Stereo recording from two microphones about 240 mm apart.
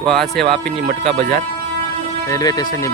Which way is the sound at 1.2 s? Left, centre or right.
Right.